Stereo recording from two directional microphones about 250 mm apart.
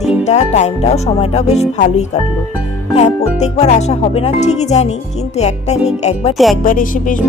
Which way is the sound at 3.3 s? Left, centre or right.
Left.